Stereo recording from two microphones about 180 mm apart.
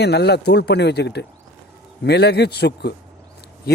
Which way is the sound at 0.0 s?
65° left (ahead or behind).